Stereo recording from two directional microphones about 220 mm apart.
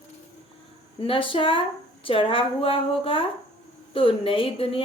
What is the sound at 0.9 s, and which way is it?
A woman's voice, 25° left (ahead or behind).